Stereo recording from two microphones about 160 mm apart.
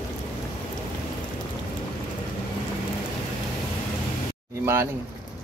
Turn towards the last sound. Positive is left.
turn(degrees=-15)  # may be behind; listen again after turning